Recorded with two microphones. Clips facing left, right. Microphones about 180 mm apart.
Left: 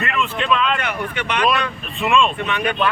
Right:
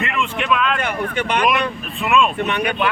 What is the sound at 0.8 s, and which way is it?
Speech, 35° right (ahead or behind).